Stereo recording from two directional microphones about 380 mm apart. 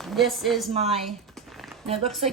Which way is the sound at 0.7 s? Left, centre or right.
Centre.